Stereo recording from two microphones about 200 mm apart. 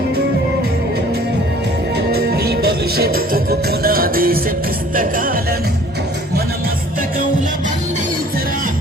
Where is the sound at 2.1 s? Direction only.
50° right (ahead or behind).